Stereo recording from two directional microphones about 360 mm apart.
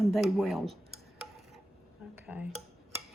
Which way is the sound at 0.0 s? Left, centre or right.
Centre.